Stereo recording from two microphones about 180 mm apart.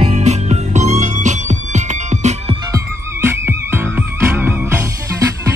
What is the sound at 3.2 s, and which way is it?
Music, 15° right (ahead or behind).